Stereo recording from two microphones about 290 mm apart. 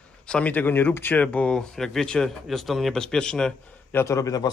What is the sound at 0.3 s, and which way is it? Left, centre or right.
Speech, centre.